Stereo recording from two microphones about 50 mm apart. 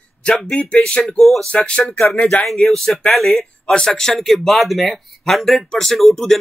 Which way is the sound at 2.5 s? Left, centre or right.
Centre.